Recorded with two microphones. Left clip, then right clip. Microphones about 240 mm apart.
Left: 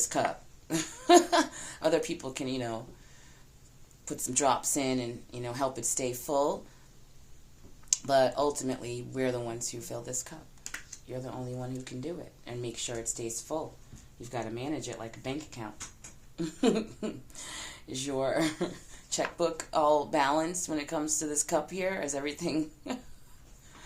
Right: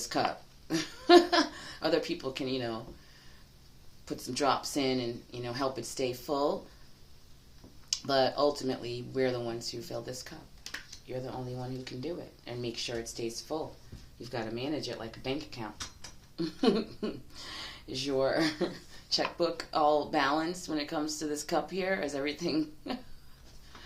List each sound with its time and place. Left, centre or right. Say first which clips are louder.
0.1 s speech: right 2 dB; left
4.0 s speech: left 2 dB; left
7.9 s speech: left 3 dB; left